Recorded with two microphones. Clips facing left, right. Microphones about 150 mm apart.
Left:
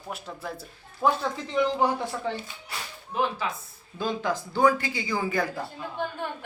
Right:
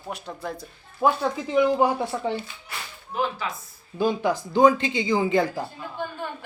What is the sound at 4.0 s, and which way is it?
Speech, 15° right (ahead or behind).